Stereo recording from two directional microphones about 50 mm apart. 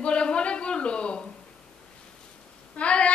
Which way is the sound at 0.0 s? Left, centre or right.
Left.